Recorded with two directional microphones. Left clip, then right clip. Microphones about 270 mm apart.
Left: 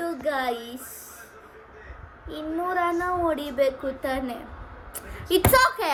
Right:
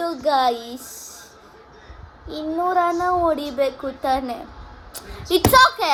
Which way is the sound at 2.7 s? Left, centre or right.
Centre.